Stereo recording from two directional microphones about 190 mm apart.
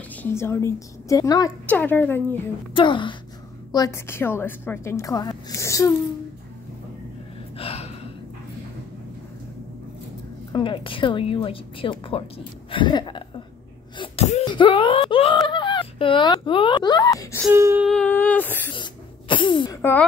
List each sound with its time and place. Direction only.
0.1 s a woman's voice: 10° left (ahead or behind)
2.7 s a woman's voice: 25° left (ahead or behind)
7.5 s gasp: 30° left (ahead or behind)
10.5 s speech: 25° left (ahead or behind)
13.9 s sneeze: 30° left (ahead or behind)
14.4 s whimper: 25° left (ahead or behind)
17.4 s a sound: 15° right (ahead or behind)
17.8 s a woman's voice: 5° left (ahead or behind)
18.8 s a sound: 25° left (ahead or behind)
19.8 s a woman's voice: 10° left (ahead or behind)